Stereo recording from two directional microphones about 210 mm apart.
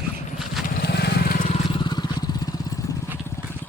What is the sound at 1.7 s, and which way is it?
Vehicle, 20° left (ahead or behind).